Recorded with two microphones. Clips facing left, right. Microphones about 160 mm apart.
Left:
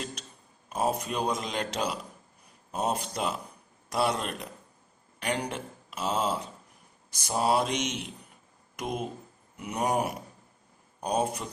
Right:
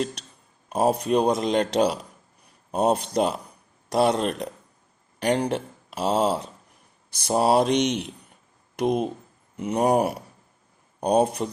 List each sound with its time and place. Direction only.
0.7 s speech: 35° right (ahead or behind)
8.7 s speech: 35° right (ahead or behind)